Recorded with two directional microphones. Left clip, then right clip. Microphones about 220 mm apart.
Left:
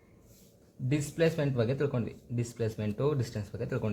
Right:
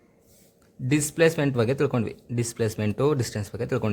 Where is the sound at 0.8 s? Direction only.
50° right (ahead or behind).